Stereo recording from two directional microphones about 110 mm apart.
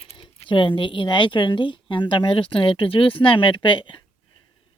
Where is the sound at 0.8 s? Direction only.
50° left (ahead or behind).